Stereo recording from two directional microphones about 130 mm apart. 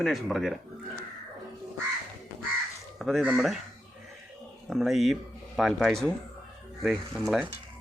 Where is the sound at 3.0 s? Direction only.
Centre (ahead or behind).